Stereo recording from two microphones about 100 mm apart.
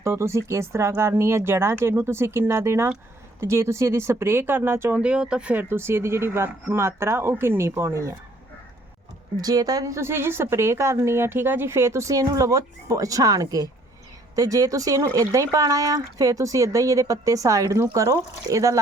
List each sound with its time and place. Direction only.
0.0 s a woman's voice: 30° right (ahead or behind)
4.9 s speech: 10° right (ahead or behind)
5.6 s a woman's voice: 25° right (ahead or behind)
9.4 s a woman's voice: 40° right (ahead or behind)